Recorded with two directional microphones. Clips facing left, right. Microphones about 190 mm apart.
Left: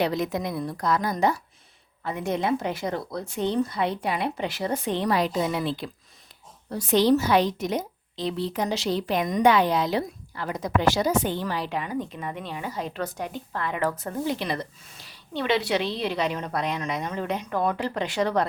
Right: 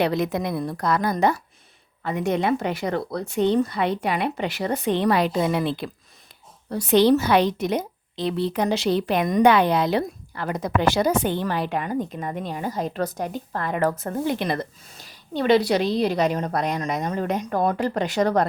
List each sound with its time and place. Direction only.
0.0 s a woman's voice: 60° right (ahead or behind); by 18.4 s 45° right (ahead or behind)